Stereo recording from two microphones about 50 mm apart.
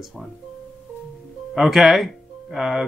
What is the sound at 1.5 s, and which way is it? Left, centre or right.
Speech, centre.